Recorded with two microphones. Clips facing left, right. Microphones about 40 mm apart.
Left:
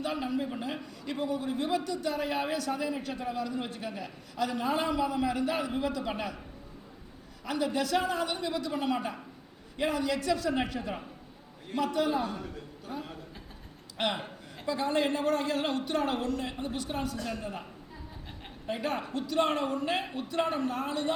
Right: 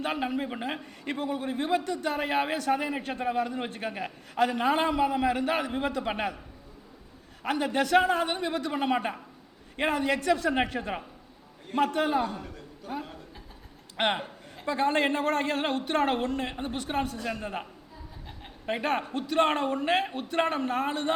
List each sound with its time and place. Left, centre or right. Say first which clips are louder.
0.0 s a man's voice: right 2 dB; right
7.4 s a man's voice: right 3 dB; right
12.9 s a sound: right 4 dB; right
13.9 s a man's voice: right 4 dB; right
17.2 s a man's voice: right 3 dB; right